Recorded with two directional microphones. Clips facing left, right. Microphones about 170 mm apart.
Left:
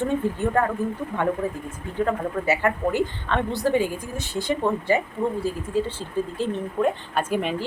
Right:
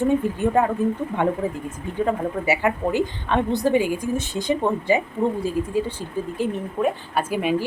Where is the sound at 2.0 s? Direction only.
15° right (ahead or behind).